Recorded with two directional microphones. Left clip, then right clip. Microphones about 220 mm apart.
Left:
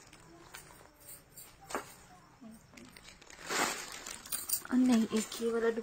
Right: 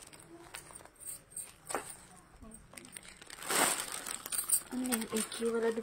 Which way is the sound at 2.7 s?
40° right (ahead or behind).